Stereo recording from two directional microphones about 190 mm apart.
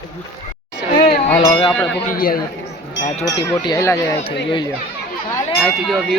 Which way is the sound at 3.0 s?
35° left (ahead or behind).